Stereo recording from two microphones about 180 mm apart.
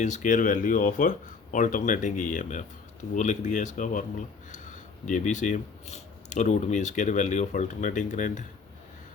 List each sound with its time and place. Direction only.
0.0 s a man's voice: 45° left (ahead or behind)